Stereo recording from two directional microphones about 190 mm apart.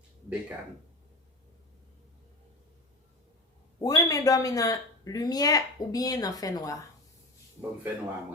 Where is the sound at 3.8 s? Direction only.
20° left (ahead or behind).